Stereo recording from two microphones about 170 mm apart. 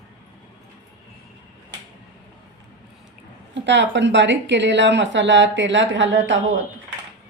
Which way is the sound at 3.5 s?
90° right.